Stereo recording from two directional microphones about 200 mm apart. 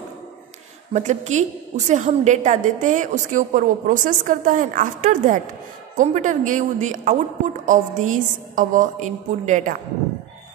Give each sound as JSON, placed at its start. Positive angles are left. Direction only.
{"t": 0.9, "sound": "a woman's voice", "side_deg": -35}